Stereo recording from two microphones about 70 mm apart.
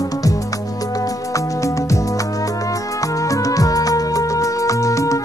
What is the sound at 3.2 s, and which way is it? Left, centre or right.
Music, left.